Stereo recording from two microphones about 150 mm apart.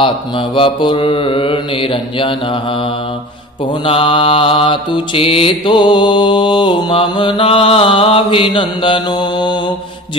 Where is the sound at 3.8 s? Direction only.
40° left (ahead or behind).